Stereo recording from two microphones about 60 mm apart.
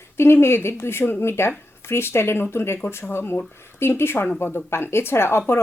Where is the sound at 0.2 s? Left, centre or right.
Left.